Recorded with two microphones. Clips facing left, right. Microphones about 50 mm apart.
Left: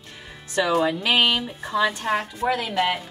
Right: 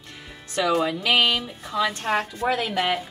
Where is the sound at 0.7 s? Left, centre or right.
Centre.